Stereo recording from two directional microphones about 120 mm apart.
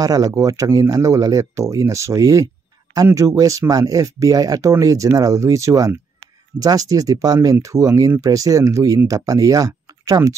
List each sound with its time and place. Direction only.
0.0 s speech: 30° right (ahead or behind)